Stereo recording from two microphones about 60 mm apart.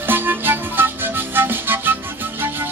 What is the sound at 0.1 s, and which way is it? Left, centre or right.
Music, right.